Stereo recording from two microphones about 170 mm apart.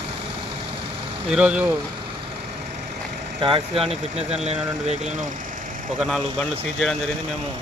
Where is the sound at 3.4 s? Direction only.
30° right (ahead or behind).